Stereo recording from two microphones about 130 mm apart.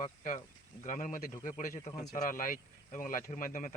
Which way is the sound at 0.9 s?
75° left (ahead or behind).